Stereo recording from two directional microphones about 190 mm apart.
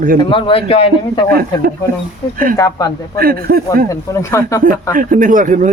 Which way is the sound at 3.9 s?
15° left (ahead or behind).